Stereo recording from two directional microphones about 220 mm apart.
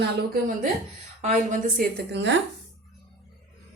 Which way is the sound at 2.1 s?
55° right (ahead or behind).